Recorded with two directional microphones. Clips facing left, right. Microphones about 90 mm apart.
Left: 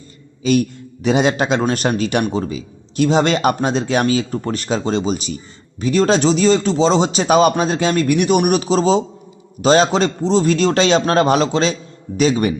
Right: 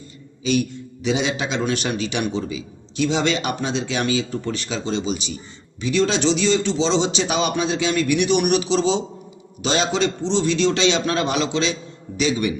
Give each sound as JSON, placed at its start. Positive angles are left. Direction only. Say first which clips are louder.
{"t": 0.4, "sound": "a man's voice", "louder": "left 5 dB", "side_deg": 45}